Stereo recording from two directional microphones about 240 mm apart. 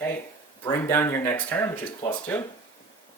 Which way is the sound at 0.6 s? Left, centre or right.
Centre.